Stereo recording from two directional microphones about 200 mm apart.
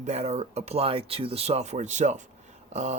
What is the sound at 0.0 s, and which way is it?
Speech, 35° right (ahead or behind).